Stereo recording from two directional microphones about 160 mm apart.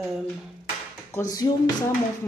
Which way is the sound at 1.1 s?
20° left (ahead or behind).